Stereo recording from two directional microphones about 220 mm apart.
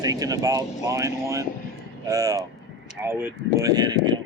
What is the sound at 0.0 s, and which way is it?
Speech, 15° right (ahead or behind).